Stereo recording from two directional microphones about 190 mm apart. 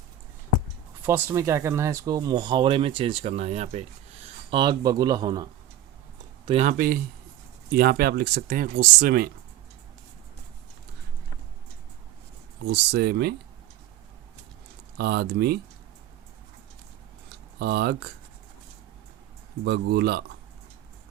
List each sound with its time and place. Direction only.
1.0 s speech: 15° right (ahead or behind)
6.4 s speech: 30° right (ahead or behind); by 9.3 s 55° right (ahead or behind)
12.6 s speech: 60° right (ahead or behind)
14.9 s speech: 55° right (ahead or behind)
17.6 s speech: 60° right (ahead or behind)
19.6 s speech: 60° right (ahead or behind)